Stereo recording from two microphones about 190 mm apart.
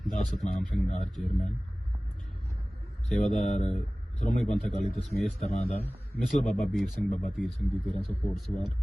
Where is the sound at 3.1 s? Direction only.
Centre (ahead or behind).